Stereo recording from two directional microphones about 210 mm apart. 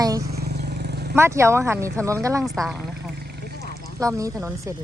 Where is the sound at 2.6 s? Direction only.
Centre (ahead or behind).